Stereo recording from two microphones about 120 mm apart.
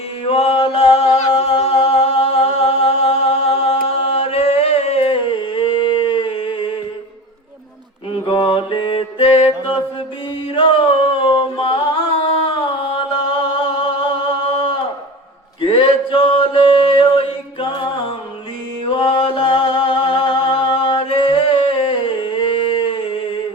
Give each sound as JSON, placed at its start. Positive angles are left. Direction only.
{"t": 0.3, "sound": "singing", "side_deg": 55}
{"t": 8.1, "sound": "mantra", "side_deg": 45}
{"t": 9.5, "sound": "music", "side_deg": 35}
{"t": 10.5, "sound": "mantra", "side_deg": 45}
{"t": 11.2, "sound": "humming", "side_deg": 45}
{"t": 13.2, "sound": "music", "side_deg": 50}
{"t": 15.6, "sound": "singing", "side_deg": 45}
{"t": 18.9, "sound": "music", "side_deg": 45}